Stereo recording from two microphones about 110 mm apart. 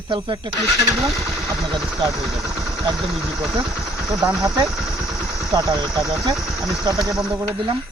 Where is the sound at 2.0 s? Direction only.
30° right (ahead or behind).